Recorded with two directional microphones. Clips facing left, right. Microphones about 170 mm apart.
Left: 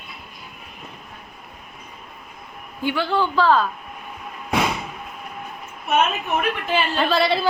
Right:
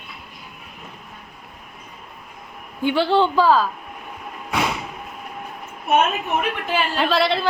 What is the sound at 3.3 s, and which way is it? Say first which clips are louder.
Speech: right 1 dB; 10° right (ahead or behind).